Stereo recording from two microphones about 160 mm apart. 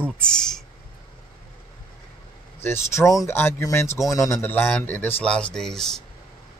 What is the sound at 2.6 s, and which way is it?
Speech, 15° left (ahead or behind).